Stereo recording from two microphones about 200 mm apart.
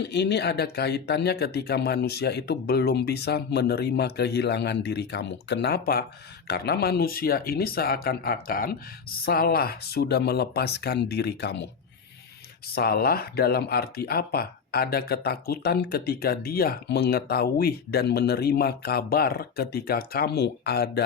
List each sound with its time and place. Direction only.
0.0 s speech: 55° left (ahead or behind)
12.7 s speech: 50° left (ahead or behind)